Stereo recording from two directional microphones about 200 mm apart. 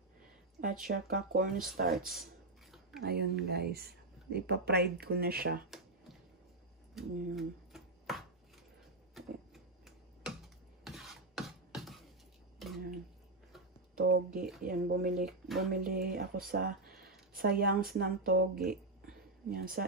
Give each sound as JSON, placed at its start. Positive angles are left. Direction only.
{"t": 0.8, "sound": "speech", "side_deg": -45}
{"t": 1.9, "sound": "speech", "side_deg": 0}
{"t": 3.0, "sound": "speech", "side_deg": -55}
{"t": 7.0, "sound": "a sound", "side_deg": 0}
{"t": 10.8, "sound": "music", "side_deg": 0}
{"t": 12.5, "sound": "a sound", "side_deg": 0}
{"t": 13.9, "sound": "speech", "side_deg": -50}
{"t": 15.4, "sound": "speech", "side_deg": 0}
{"t": 15.7, "sound": "speech", "side_deg": -45}